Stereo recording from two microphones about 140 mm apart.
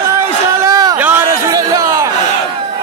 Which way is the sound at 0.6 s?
25° right (ahead or behind).